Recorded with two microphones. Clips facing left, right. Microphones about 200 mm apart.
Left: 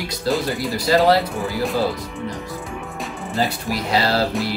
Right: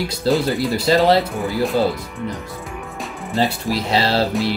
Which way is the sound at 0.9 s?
25° right (ahead or behind).